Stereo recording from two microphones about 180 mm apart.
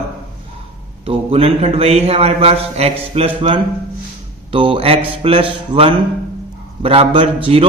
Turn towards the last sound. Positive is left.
turn(degrees=-30)  # may be behind; listen again after turning